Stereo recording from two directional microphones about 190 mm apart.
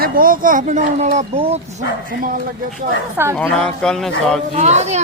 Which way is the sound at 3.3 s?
5° left (ahead or behind).